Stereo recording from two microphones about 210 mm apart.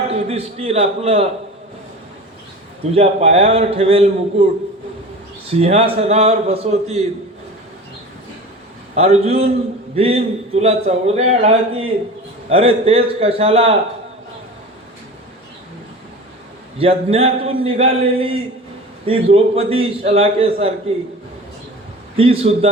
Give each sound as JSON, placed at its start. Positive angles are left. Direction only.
{"t": 0.1, "sound": "speech", "side_deg": -30}
{"t": 2.9, "sound": "speech", "side_deg": -30}
{"t": 5.5, "sound": "speech", "side_deg": -30}
{"t": 9.0, "sound": "speech", "side_deg": -30}
{"t": 16.7, "sound": "speech", "side_deg": -25}
{"t": 22.1, "sound": "speech", "side_deg": -25}